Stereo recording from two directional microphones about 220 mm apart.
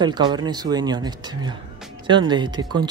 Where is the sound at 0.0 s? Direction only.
20° right (ahead or behind).